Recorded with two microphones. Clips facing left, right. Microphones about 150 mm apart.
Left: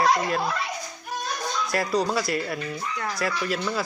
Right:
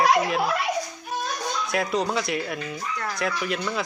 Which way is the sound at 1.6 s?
Centre (ahead or behind).